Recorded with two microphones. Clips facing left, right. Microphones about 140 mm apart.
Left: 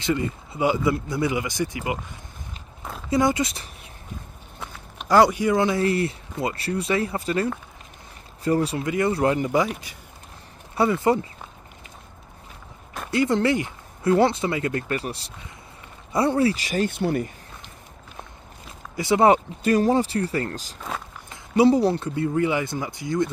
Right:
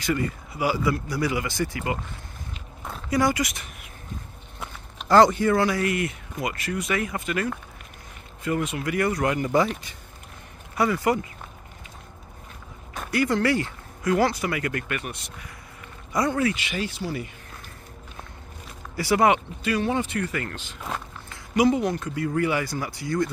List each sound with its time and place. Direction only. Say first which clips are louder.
0.0 s speech: left 1 dB; 25° left (ahead or behind)
3.1 s speech: left 2 dB; 25° left (ahead or behind)
5.0 s speech: even; 10° left (ahead or behind); by 7.4 s 30° left (ahead or behind)
8.5 s speech: left 4 dB; 35° left (ahead or behind)
9.5 s speech: even; 10° left (ahead or behind)
10.8 s speech: left 3 dB; 25° left (ahead or behind)
13.1 s speech: left 2 dB; 25° left (ahead or behind); by 17.3 s 55° left (ahead or behind)
18.9 s speech: left 3 dB; 20° left (ahead or behind)
19.3 s speech: left 5 dB; 40° left (ahead or behind); by 23.3 s 20° left (ahead or behind)